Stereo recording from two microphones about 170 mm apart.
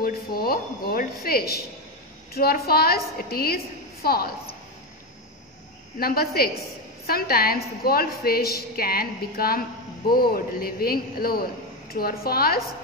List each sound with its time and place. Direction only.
0.0 s a woman's voice: 60° left (ahead or behind)
5.9 s a woman's voice: 65° left (ahead or behind)